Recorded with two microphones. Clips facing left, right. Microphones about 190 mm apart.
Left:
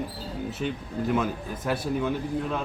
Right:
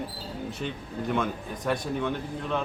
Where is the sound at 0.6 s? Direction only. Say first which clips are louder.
Left 4 dB; 5° left (ahead or behind).